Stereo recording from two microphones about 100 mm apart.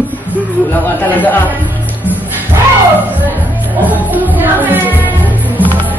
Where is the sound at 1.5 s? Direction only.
15° right (ahead or behind).